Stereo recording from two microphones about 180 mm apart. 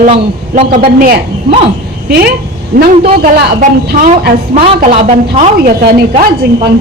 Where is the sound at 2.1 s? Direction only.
55° right (ahead or behind).